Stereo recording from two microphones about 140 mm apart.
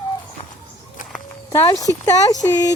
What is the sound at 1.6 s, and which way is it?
Speech, 25° left (ahead or behind).